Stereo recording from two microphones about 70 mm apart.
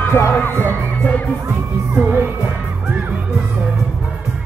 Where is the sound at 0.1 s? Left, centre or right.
Left.